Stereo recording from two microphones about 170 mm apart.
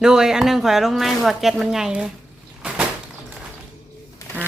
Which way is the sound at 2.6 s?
5° right (ahead or behind).